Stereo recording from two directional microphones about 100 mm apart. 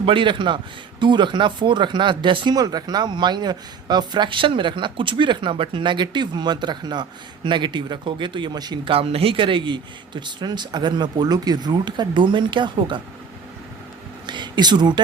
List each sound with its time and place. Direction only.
0.0 s speech: 60° right (ahead or behind)
8.8 s speech: 65° right (ahead or behind); by 13.0 s 50° right (ahead or behind)
14.3 s speech: 50° right (ahead or behind)